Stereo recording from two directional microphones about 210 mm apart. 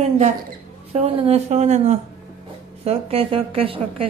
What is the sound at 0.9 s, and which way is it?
A woman's voice, 30° right (ahead or behind).